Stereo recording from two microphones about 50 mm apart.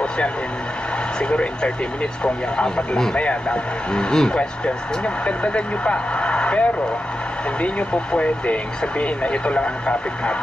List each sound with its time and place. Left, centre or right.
1.3 s speech: left